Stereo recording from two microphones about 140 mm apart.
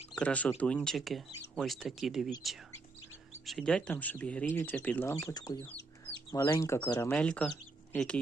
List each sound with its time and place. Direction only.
0.2 s speech: 10° left (ahead or behind)
3.4 s speech: 5° left (ahead or behind); by 6.9 s 20° left (ahead or behind)
7.1 s speech: 10° left (ahead or behind)